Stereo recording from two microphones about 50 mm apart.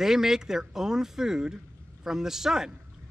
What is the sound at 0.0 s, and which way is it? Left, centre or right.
Speech, centre.